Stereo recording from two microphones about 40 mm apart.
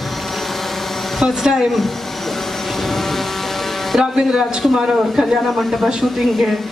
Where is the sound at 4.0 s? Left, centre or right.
Centre.